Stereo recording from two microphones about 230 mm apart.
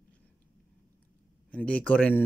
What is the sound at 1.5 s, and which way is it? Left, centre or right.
Speech, centre.